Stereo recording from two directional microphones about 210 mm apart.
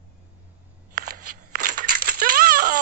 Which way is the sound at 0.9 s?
45° right (ahead or behind).